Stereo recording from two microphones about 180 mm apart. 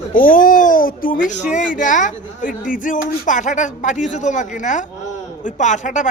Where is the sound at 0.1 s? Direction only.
50° left (ahead or behind).